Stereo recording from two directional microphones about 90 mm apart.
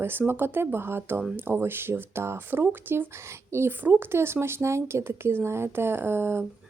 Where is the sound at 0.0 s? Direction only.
25° right (ahead or behind).